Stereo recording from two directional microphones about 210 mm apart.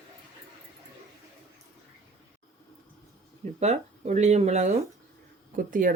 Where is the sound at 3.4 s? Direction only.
30° right (ahead or behind).